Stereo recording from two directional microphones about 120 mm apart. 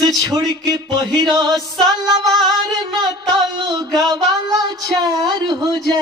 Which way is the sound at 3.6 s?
35° right (ahead or behind).